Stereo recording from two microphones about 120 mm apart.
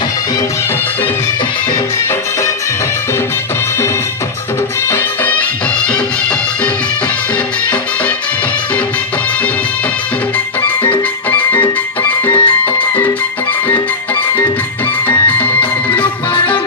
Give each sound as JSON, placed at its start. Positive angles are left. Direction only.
{"t": 10.8, "sound": "music", "side_deg": 15}
{"t": 15.0, "sound": "music", "side_deg": 15}